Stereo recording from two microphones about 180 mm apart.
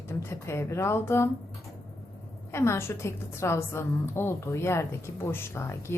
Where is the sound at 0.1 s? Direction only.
15° left (ahead or behind).